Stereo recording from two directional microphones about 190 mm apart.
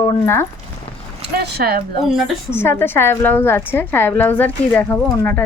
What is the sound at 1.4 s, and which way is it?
Speech, 55° right (ahead or behind).